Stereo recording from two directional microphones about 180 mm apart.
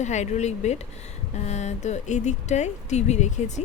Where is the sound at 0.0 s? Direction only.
40° left (ahead or behind).